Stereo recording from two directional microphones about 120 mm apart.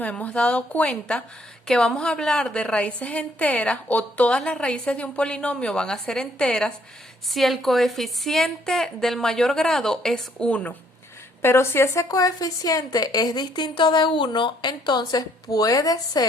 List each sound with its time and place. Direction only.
0.0 s a woman's voice: 10° left (ahead or behind); by 16.2 s 30° left (ahead or behind)